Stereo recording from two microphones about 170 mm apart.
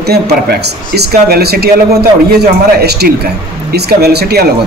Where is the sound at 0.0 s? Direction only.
70° right (ahead or behind).